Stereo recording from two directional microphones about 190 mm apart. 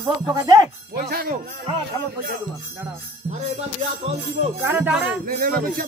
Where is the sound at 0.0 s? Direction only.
20° right (ahead or behind).